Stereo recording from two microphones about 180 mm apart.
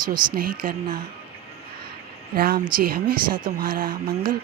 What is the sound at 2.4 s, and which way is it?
Speech, 55° right (ahead or behind).